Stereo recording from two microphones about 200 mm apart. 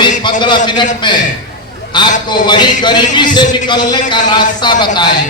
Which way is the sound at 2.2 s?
20° left (ahead or behind).